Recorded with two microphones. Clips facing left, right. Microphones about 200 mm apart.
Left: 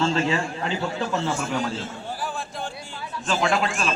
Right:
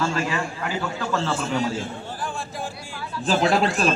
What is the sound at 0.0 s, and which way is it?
A man's voice, 25° left (ahead or behind).